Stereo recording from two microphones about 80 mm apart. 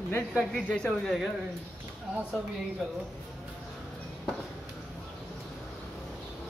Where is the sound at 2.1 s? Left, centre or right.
Centre.